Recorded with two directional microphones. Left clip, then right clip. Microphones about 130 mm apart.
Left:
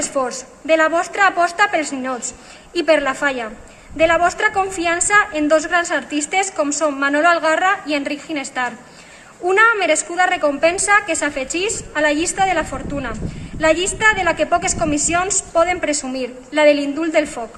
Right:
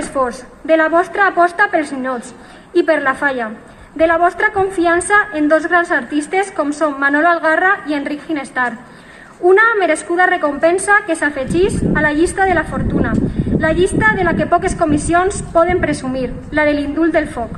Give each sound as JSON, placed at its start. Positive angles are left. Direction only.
{"t": 0.2, "sound": "a woman's voice", "side_deg": 40}